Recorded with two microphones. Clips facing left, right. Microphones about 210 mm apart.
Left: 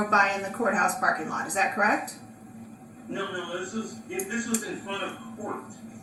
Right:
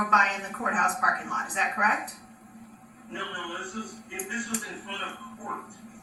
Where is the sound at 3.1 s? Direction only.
40° left (ahead or behind).